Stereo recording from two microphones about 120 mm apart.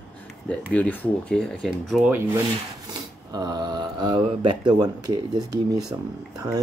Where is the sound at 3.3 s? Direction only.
35° right (ahead or behind).